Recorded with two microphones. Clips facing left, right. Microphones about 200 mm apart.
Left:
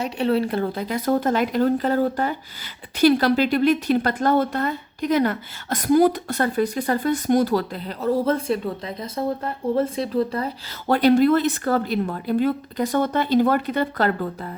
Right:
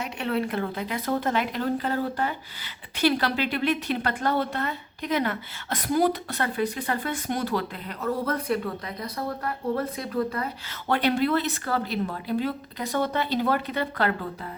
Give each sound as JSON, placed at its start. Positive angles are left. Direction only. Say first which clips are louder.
{"t": 0.0, "sound": "a woman's voice", "louder": "left 6 dB", "side_deg": 35}